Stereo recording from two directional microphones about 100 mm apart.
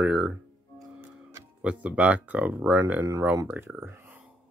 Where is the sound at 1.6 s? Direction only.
10° right (ahead or behind).